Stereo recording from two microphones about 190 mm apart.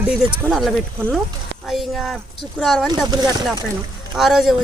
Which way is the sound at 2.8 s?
20° right (ahead or behind).